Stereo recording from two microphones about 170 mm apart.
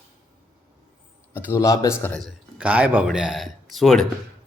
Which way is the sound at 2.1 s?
Centre (ahead or behind).